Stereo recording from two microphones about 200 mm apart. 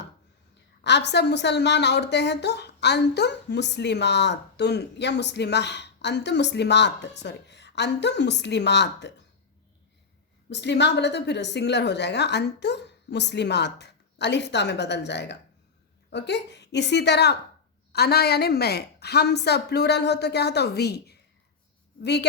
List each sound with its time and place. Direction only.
0.9 s a woman's voice: 60° left (ahead or behind)
10.5 s a woman's voice: 60° left (ahead or behind)